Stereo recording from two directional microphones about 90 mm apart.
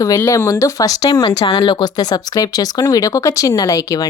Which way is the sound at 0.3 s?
35° left (ahead or behind).